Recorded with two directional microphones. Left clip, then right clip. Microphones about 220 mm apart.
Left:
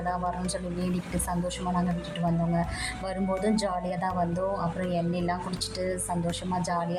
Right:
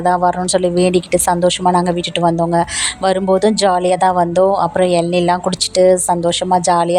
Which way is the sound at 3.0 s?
35° right (ahead or behind).